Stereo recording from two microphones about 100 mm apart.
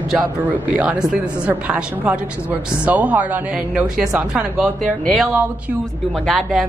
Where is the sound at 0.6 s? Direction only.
15° right (ahead or behind).